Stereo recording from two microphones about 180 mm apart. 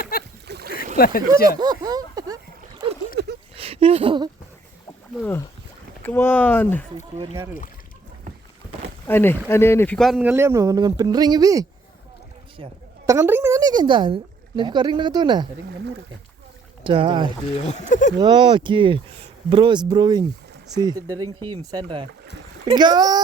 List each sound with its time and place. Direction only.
0.0 s boat: 55° left (ahead or behind)
0.4 s boat: 65° right (ahead or behind)
0.9 s speech: 55° left (ahead or behind)
1.5 s a sound: 20° right (ahead or behind)
3.2 s a sound: 65° right (ahead or behind)
3.5 s a sound: 30° right (ahead or behind)
5.2 s speech: 10° left (ahead or behind)
7.3 s speech: 15° right (ahead or behind)
9.0 s speech: 10° left (ahead or behind); by 11.6 s 20° right (ahead or behind)
13.1 s speech: 15° right (ahead or behind)
16.8 s speech: 30° right (ahead or behind)
17.7 s speech: 40° left (ahead or behind)
18.2 s speech: 25° right (ahead or behind)